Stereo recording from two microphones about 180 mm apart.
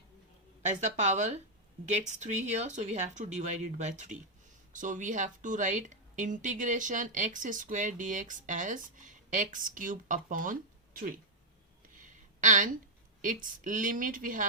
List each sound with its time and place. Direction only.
0.6 s speech: 40° right (ahead or behind)
12.4 s a woman's voice: 45° right (ahead or behind)